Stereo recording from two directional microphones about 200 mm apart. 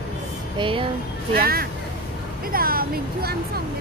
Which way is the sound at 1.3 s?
50° right (ahead or behind).